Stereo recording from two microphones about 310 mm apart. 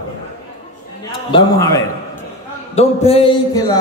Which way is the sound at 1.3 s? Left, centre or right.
Centre.